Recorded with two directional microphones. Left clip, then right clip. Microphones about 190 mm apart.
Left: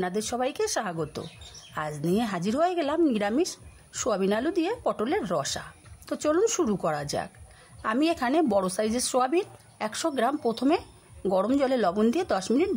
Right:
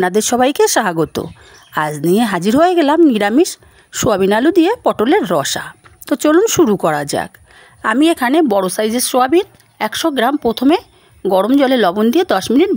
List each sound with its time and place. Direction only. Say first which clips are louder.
0.0 s a woman's voice: right 15 dB; 45° right (ahead or behind)